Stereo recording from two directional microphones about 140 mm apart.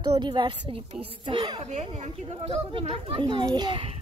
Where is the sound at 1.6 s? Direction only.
60° right (ahead or behind).